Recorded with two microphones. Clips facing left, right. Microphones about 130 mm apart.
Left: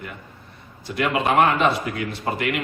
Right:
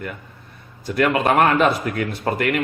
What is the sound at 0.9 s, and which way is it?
A man's voice, 50° right (ahead or behind).